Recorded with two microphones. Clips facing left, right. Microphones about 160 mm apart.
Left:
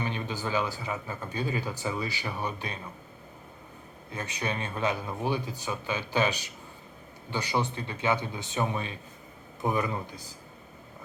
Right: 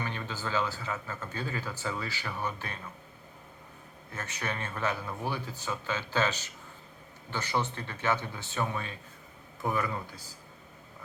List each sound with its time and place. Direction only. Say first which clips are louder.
0.0 s speech: left 4 dB; 20° left (ahead or behind)
4.1 s a man's voice: left 3 dB; 15° left (ahead or behind)